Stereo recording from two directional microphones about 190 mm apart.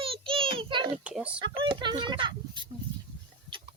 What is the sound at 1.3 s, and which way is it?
Speech, 25° right (ahead or behind).